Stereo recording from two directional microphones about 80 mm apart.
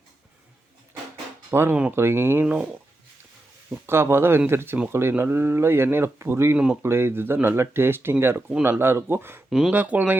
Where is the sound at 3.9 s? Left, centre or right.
Right.